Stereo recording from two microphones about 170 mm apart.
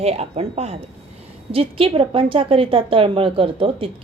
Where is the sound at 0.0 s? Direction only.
35° right (ahead or behind).